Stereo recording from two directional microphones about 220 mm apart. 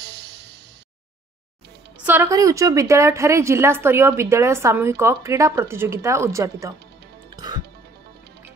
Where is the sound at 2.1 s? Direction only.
10° right (ahead or behind).